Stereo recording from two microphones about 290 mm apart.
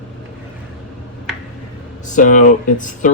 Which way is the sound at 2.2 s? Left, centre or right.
Left.